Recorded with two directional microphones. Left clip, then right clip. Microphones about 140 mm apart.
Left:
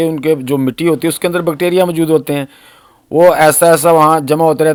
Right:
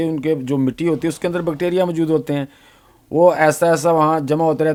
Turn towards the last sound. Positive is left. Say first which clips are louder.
# left 6 dB
turn(degrees=25)  # may be behind; listen again after turning